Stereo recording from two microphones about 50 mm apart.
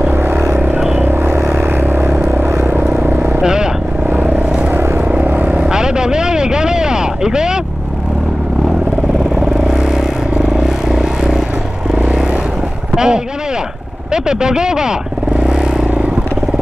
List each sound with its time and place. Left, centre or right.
0.1 s vehicle: right
3.3 s vehicle: centre
4.1 s vehicle: right
5.6 s vehicle: centre
9.4 s vehicle: centre
12.9 s a sound: centre
14.1 s speech: centre
15.4 s vehicle: centre